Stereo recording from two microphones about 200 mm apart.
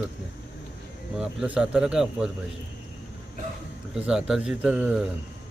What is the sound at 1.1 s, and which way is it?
Speech, 5° right (ahead or behind).